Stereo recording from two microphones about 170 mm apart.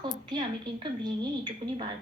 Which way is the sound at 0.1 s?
25° right (ahead or behind).